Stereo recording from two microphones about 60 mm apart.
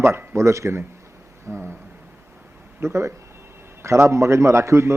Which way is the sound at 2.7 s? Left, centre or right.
Right.